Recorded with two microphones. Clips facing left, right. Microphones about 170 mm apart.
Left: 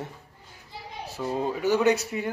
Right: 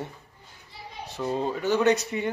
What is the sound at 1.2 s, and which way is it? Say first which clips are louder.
Speech: even; 5° left (ahead or behind).